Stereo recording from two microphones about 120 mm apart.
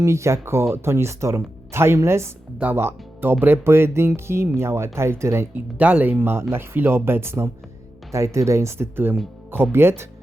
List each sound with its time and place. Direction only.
0.0 s speech: 25° right (ahead or behind)